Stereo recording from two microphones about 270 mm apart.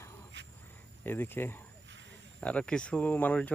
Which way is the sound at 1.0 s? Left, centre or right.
Centre.